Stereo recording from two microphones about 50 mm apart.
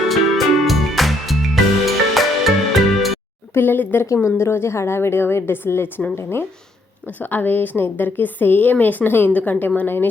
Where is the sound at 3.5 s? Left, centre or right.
Left.